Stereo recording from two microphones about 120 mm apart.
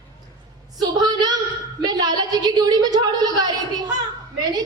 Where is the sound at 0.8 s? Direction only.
35° right (ahead or behind).